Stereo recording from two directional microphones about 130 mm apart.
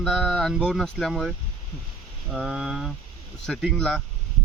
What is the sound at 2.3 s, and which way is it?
Speech, 5° right (ahead or behind).